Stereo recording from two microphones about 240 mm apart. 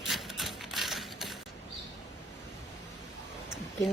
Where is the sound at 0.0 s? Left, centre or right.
Centre.